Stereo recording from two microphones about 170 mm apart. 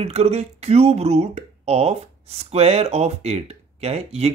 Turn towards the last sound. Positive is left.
turn(degrees=-35)  # may be behind; listen again after turning